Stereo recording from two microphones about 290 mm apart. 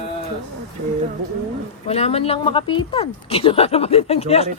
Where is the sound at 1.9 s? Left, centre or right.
Left.